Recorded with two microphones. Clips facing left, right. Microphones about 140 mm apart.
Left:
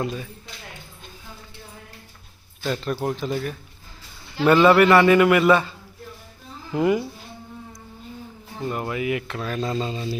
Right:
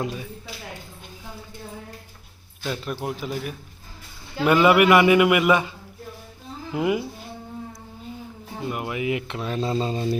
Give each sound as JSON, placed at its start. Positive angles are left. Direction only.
{"t": 0.0, "sound": "a man's voice", "side_deg": -10}
{"t": 2.6, "sound": "a man's voice", "side_deg": -5}
{"t": 6.7, "sound": "a man's voice", "side_deg": -5}
{"t": 8.6, "sound": "speech", "side_deg": -10}